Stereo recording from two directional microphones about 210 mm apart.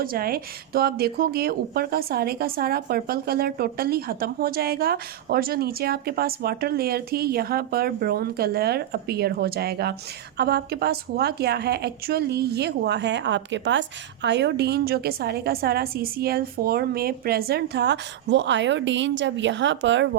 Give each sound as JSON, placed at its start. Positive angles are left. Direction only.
{"t": 0.0, "sound": "a woman's voice", "side_deg": -45}